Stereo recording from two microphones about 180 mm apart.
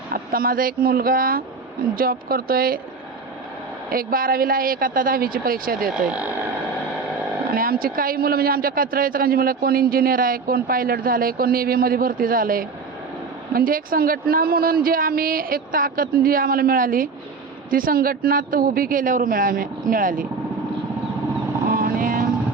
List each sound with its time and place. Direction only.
0.1 s speech: 55° right (ahead or behind)
3.8 s a man's voice: 50° right (ahead or behind)
6.1 s speech: 5° right (ahead or behind)
7.5 s a man's voice: 55° right (ahead or behind)
21.7 s vehicle: 50° right (ahead or behind)